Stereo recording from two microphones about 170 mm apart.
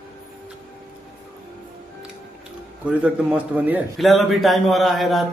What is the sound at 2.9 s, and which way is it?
A man's voice, 10° right (ahead or behind).